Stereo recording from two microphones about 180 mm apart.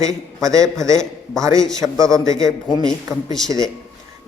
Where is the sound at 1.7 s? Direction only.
15° right (ahead or behind).